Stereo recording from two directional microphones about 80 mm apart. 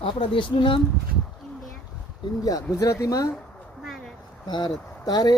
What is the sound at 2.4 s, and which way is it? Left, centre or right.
Speech, left.